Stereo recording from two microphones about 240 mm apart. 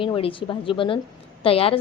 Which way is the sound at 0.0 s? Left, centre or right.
Left.